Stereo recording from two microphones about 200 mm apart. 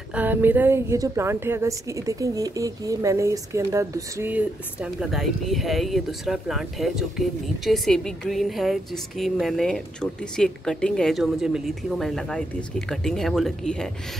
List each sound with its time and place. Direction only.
0.1 s a woman's voice: 10° right (ahead or behind)